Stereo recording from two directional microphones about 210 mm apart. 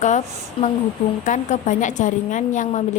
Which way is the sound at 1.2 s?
35° left (ahead or behind).